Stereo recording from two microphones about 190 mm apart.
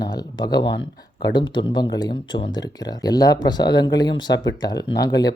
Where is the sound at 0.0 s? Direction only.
20° left (ahead or behind).